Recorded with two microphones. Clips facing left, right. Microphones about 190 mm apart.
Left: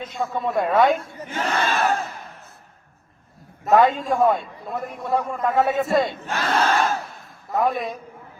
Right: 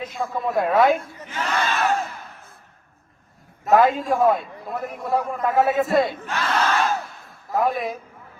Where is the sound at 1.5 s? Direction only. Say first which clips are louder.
Left 1 dB; 55° left (ahead or behind).